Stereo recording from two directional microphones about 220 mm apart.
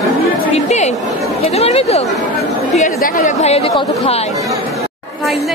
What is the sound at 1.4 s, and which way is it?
Speech, 30° left (ahead or behind).